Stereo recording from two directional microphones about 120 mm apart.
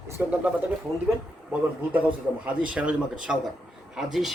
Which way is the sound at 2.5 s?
10° right (ahead or behind).